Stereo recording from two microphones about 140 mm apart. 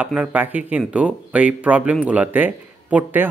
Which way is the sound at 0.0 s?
10° right (ahead or behind).